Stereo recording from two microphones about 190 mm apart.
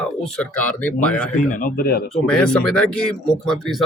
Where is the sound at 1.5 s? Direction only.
45° left (ahead or behind).